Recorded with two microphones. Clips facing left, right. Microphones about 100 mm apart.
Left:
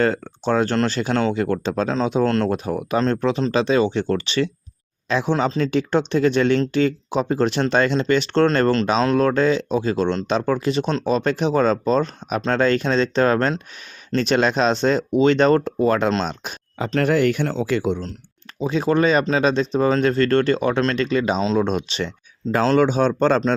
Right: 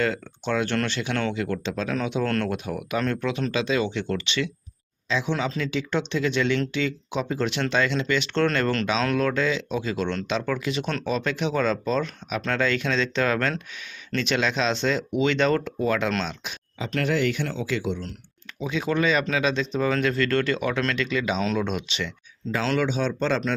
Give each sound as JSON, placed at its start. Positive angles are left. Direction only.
{"t": 0.0, "sound": "speech", "side_deg": 40}
{"t": 5.0, "sound": "speech", "side_deg": 55}
{"t": 5.5, "sound": "speech", "side_deg": 40}